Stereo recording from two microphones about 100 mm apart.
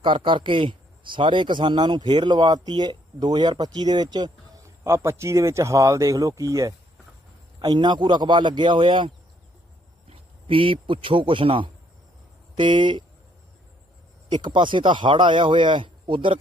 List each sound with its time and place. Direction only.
0.0 s speech: 55° right (ahead or behind)
4.8 s speech: 30° right (ahead or behind)
7.6 s a man's voice: 45° right (ahead or behind)
14.3 s speech: 50° right (ahead or behind)